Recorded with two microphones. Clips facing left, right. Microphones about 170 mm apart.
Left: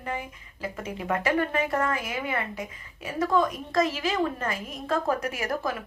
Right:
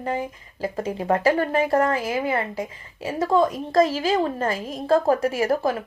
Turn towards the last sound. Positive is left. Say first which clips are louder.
# right 8 dB
turn(degrees=-30)  # may be behind; listen again after turning